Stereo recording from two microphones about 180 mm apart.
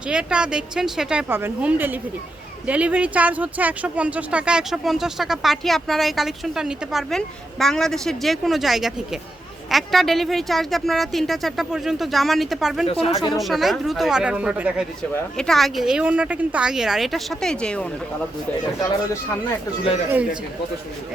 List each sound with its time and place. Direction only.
0.1 s speech: 5° right (ahead or behind)
12.9 s speech: 30° left (ahead or behind)
13.4 s speech: centre (ahead or behind)
18.8 s speech: 15° left (ahead or behind)